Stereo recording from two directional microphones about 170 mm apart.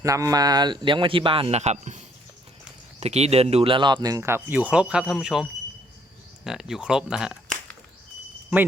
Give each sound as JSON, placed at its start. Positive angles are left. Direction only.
{"t": 0.0, "sound": "speech", "side_deg": -20}